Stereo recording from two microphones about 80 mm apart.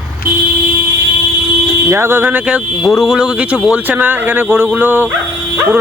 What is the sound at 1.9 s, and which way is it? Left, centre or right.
Speech, right.